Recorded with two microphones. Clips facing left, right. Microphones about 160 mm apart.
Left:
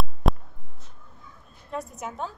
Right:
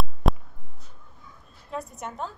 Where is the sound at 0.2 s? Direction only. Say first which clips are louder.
Even; centre (ahead or behind).